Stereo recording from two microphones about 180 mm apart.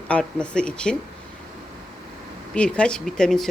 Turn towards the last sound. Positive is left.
turn(degrees=0)  # may be behind; listen again after turning